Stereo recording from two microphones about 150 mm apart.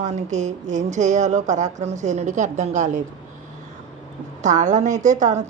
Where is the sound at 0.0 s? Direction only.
50° right (ahead or behind).